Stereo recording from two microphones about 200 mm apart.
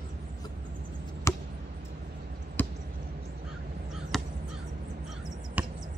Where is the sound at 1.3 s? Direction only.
15° left (ahead or behind).